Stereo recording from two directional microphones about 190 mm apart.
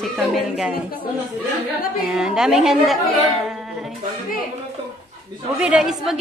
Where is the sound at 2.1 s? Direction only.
5° right (ahead or behind).